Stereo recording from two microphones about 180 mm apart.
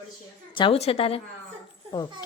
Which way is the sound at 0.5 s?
30° left (ahead or behind).